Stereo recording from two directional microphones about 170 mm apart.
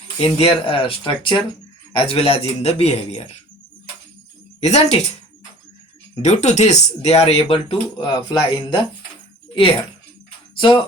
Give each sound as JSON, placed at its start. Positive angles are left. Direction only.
{"t": 0.2, "sound": "speech", "side_deg": 35}
{"t": 4.6, "sound": "speech", "side_deg": 40}
{"t": 6.2, "sound": "speech", "side_deg": 40}
{"t": 10.5, "sound": "a sound", "side_deg": 30}